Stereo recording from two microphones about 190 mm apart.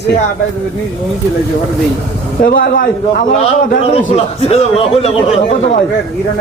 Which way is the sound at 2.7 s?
45° left (ahead or behind).